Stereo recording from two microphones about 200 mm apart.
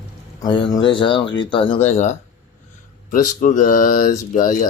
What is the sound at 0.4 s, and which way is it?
Speech, 25° left (ahead or behind).